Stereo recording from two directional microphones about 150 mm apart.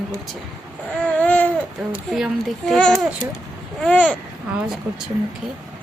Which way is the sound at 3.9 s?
10° left (ahead or behind).